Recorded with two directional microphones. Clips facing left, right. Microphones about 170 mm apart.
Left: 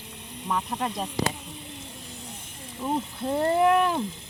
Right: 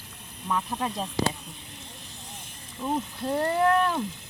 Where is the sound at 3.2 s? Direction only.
Centre (ahead or behind).